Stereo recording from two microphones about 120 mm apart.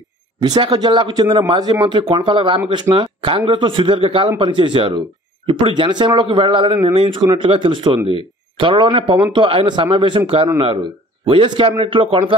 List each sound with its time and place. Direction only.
0.4 s speech: 40° right (ahead or behind)